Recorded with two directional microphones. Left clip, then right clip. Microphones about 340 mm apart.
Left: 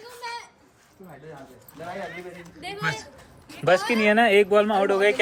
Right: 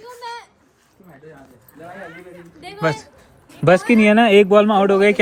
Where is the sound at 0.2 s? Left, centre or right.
Centre.